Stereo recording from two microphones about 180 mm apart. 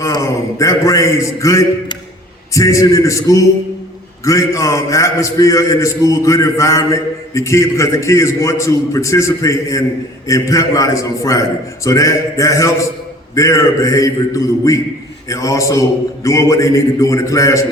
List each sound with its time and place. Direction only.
0.0 s a man's voice: 20° left (ahead or behind)